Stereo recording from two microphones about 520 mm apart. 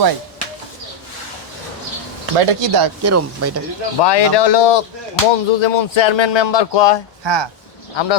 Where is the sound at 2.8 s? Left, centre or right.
Right.